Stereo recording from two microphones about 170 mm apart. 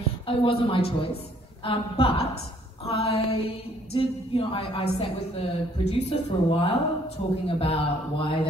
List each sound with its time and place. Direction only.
0.3 s speech: 30° left (ahead or behind)